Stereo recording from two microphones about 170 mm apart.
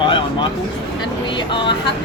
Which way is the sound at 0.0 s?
30° left (ahead or behind).